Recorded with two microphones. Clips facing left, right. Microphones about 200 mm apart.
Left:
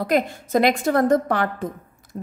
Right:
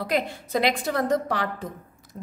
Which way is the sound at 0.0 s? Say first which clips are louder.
Left 5 dB; 45° left (ahead or behind).